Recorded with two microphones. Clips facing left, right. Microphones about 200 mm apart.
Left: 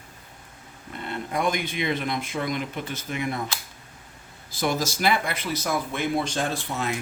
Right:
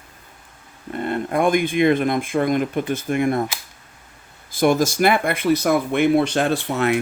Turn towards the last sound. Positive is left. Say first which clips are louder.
# right 9 dB
turn(degrees=-65)  # may be behind; listen again after turning